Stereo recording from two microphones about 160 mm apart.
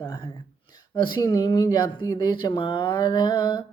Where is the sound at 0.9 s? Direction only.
25° left (ahead or behind).